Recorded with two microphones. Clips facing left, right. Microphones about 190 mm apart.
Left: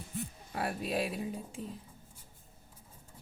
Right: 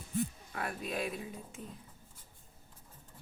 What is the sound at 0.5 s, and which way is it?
A woman's voice, 35° left (ahead or behind).